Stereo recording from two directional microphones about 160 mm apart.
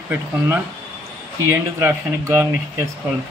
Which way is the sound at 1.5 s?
15° right (ahead or behind).